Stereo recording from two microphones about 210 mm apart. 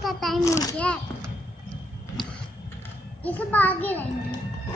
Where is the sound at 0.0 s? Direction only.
Centre (ahead or behind).